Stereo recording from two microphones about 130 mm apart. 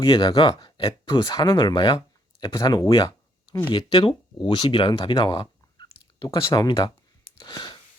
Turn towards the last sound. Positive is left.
turn(degrees=35)  # may be behind; listen again after turning